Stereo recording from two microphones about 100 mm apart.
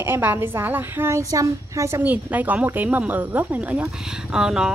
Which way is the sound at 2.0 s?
15° right (ahead or behind).